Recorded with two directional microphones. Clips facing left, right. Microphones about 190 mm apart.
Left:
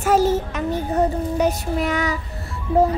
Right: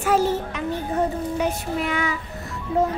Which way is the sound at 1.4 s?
40° left (ahead or behind).